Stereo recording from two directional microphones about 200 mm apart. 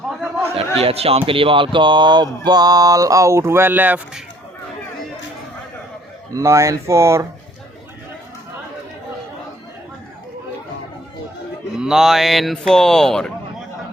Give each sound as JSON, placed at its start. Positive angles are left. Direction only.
{"t": 0.5, "sound": "a man's voice", "side_deg": -30}
{"t": 6.3, "sound": "speech", "side_deg": -15}
{"t": 11.8, "sound": "speech", "side_deg": 0}